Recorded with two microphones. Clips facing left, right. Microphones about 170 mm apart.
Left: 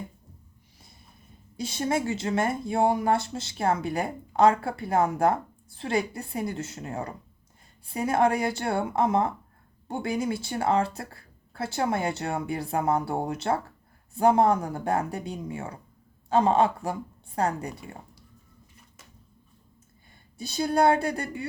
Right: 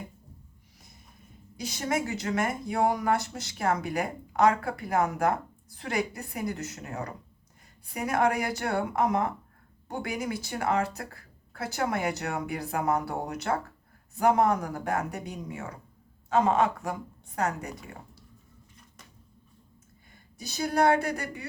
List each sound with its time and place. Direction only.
1.5 s a woman's voice: 25° left (ahead or behind)
20.4 s speech: 30° left (ahead or behind)